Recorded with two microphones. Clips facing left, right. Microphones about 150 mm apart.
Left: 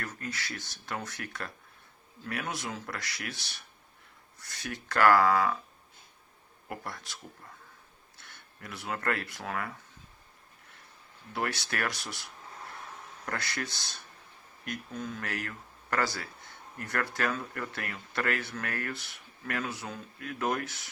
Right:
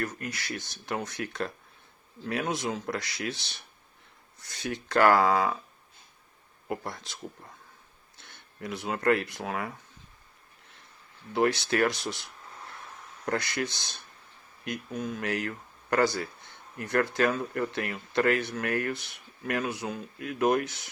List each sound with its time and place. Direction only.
0.0 s speech: 15° right (ahead or behind)
6.7 s speech: 20° right (ahead or behind)
8.2 s speech: 20° right (ahead or behind)
11.3 s speech: 20° right (ahead or behind)